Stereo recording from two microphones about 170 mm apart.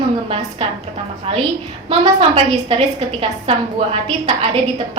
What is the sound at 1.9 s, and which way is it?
A woman's voice, 30° right (ahead or behind).